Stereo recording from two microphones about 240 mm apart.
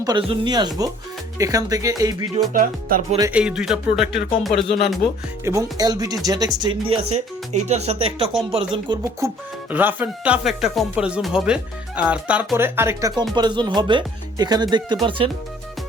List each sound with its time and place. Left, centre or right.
0.0 s speech: centre
2.5 s music: right
3.2 s speech: centre
5.7 s speech: centre
8.3 s speech: centre
8.5 s speech: centre